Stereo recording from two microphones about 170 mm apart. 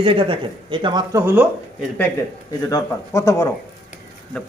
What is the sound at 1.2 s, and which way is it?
Speech, 10° right (ahead or behind).